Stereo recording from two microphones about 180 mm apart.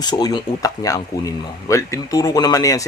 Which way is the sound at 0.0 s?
20° left (ahead or behind).